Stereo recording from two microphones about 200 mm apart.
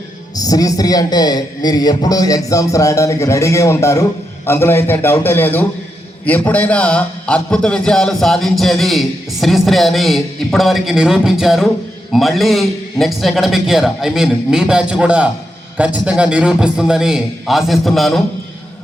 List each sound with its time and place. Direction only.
0.3 s a man's voice: 20° left (ahead or behind); by 18.2 s centre (ahead or behind)